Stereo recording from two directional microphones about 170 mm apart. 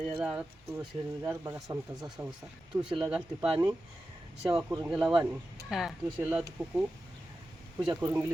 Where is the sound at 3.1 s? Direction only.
5° right (ahead or behind).